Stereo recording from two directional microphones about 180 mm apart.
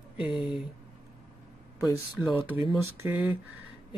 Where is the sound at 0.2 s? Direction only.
5° right (ahead or behind).